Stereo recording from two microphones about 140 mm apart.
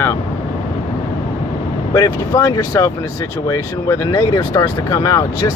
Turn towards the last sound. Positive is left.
turn(degrees=25)  # may be behind; listen again after turning